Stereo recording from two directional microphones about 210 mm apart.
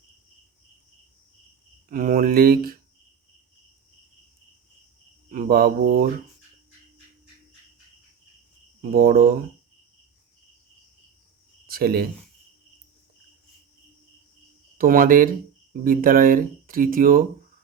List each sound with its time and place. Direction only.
1.9 s speech: 45° right (ahead or behind)
5.3 s mantra: 45° right (ahead or behind)
8.8 s speech: 45° right (ahead or behind)
11.6 s speech: 45° right (ahead or behind)
14.8 s speech: 40° right (ahead or behind)